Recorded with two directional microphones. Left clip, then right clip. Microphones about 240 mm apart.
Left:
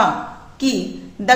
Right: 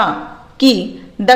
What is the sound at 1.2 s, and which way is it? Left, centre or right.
Speech, right.